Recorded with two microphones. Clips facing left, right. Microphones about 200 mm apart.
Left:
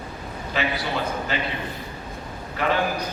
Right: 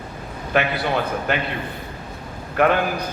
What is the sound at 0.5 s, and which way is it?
Speech, 60° right (ahead or behind).